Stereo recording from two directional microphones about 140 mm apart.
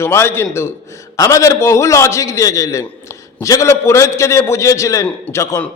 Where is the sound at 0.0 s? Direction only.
15° left (ahead or behind).